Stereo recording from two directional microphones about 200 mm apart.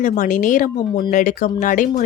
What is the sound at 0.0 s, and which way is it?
Speech, 40° left (ahead or behind).